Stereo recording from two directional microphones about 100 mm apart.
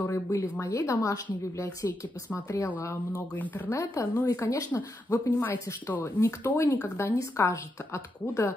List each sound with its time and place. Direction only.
0.0 s speech: 30° left (ahead or behind); by 3.7 s 15° left (ahead or behind)
3.7 s speech: 30° left (ahead or behind)
5.1 s speech: 20° left (ahead or behind)